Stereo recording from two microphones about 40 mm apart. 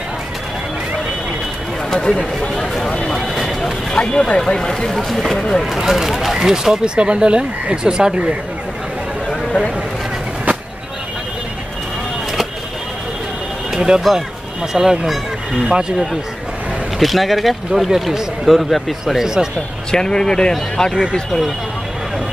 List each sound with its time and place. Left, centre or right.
1.9 s speech: centre
2.5 s a sound: centre
3.9 s speech: left
5.8 s speech: centre
13.7 s speech: centre
17.0 s speech: centre
19.1 s speech: centre
19.9 s speech: centre
20.9 s speech: centre